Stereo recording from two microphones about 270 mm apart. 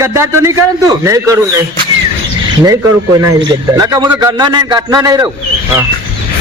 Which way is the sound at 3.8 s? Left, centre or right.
Centre.